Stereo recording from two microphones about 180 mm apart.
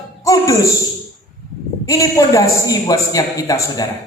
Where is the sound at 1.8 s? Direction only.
20° left (ahead or behind).